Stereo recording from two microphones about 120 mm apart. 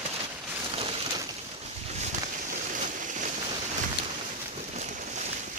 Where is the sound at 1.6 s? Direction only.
65° right (ahead or behind); by 3.3 s 90° right.